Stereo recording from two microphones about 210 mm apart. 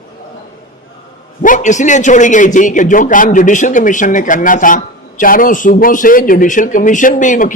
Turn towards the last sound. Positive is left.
turn(degrees=40)  # may be behind; listen again after turning